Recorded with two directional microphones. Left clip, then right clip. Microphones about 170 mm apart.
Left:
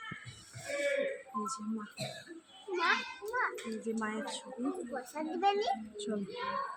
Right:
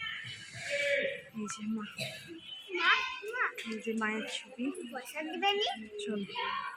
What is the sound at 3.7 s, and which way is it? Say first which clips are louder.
Speech: right 3 dB; centre (ahead or behind).